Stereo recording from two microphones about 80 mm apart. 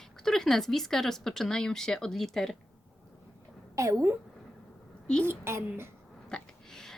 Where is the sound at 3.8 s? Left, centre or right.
Right.